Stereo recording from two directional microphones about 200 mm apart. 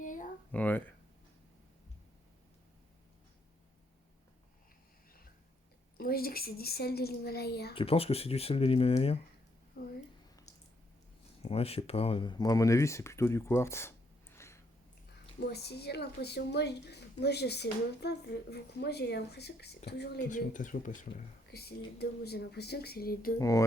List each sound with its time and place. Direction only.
0.0 s a sound: 40° left (ahead or behind)
0.5 s speech: 10° left (ahead or behind)
6.0 s speech: 50° left (ahead or behind)
7.7 s speech: 25° left (ahead or behind)
11.4 s speech: 30° left (ahead or behind); by 14.6 s 15° left (ahead or behind)
15.4 s speech: 55° left (ahead or behind)
20.3 s speech: 40° left (ahead or behind)
21.5 s speech: 55° left (ahead or behind)
23.4 s speech: 15° left (ahead or behind)